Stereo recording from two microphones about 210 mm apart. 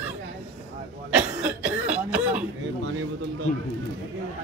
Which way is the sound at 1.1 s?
5° right (ahead or behind).